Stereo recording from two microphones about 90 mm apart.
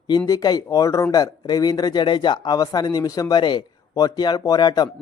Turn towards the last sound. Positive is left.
turn(degrees=50)  # may be behind; listen again after turning